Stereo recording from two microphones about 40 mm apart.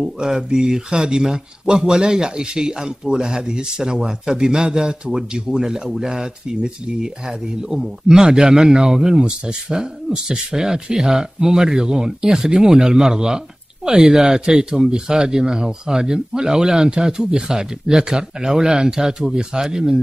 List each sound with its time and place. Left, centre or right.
0.0 s speech: centre